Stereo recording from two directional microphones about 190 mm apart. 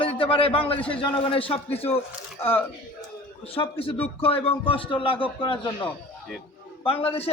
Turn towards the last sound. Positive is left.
turn(degrees=30)  # may be behind; listen again after turning